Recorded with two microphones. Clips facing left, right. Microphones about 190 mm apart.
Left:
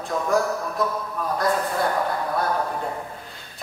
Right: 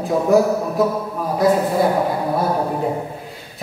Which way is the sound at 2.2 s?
25° right (ahead or behind).